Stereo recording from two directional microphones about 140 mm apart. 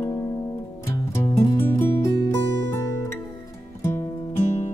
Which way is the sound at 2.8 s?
20° left (ahead or behind).